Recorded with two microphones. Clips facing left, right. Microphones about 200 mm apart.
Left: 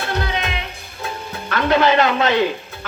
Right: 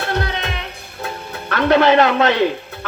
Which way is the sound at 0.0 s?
60° right (ahead or behind).